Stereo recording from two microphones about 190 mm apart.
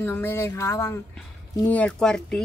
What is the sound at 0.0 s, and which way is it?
Speech, 10° left (ahead or behind).